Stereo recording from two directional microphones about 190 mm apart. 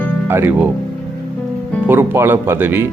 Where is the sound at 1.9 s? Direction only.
10° right (ahead or behind).